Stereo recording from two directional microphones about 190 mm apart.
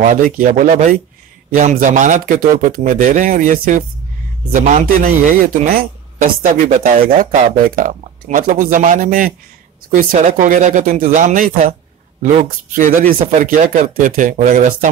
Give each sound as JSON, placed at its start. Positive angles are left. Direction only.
{"t": 0.0, "sound": "speech", "side_deg": -45}